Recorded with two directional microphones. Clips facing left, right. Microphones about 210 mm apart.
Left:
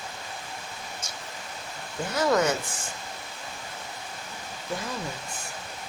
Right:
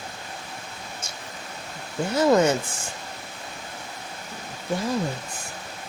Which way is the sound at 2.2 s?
25° right (ahead or behind).